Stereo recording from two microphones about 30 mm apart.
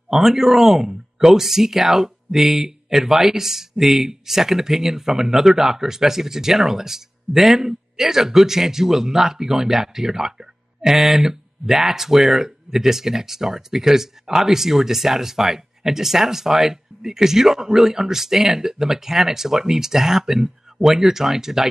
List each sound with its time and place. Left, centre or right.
0.1 s speech: centre